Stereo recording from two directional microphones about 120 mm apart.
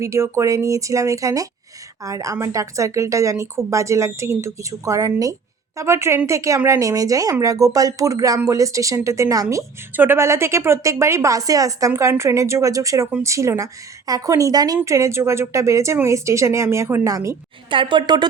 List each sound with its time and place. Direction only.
0.0 s a woman's voice: 25° right (ahead or behind)
9.9 s a woman's voice: 15° right (ahead or behind)
17.7 s a woman's voice: 45° right (ahead or behind)